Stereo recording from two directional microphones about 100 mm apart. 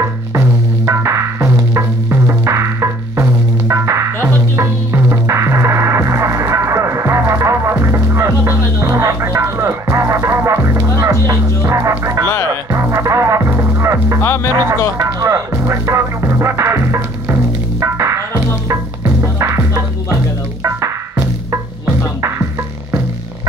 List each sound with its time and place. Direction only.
0.8 s music: 30° right (ahead or behind)
14.2 s music: 25° left (ahead or behind)
14.5 s music: 35° right (ahead or behind)